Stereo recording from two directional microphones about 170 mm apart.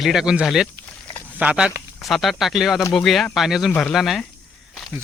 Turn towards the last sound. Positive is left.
turn(degrees=0)  # may be behind; listen again after turning